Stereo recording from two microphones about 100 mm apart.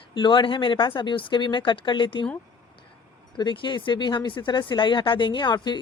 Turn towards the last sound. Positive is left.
turn(degrees=45)  # may be behind; listen again after turning